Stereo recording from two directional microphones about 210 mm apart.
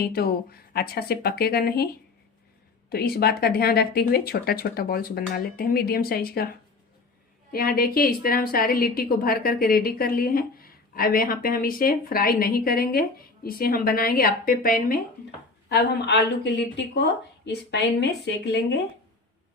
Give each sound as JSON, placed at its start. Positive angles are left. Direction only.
{"t": 0.0, "sound": "a woman's voice", "side_deg": 45}
{"t": 2.9, "sound": "a woman's voice", "side_deg": 45}
{"t": 7.5, "sound": "a woman's voice", "side_deg": 45}